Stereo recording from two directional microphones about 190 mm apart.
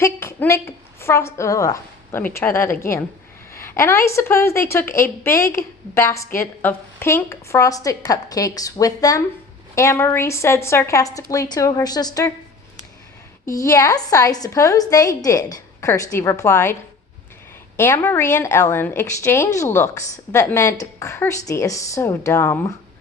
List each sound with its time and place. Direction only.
0.0 s a woman's voice: 15° left (ahead or behind)
13.4 s a woman's voice: 15° left (ahead or behind)
17.7 s a woman's voice: 10° left (ahead or behind)